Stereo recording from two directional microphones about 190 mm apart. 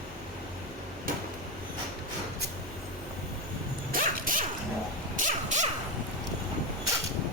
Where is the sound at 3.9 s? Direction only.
45° right (ahead or behind).